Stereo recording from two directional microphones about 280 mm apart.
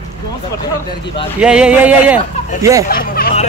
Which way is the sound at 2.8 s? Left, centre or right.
Left.